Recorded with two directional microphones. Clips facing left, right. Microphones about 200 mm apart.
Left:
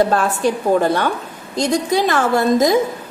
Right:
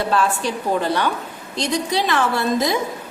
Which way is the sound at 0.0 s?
45° left (ahead or behind).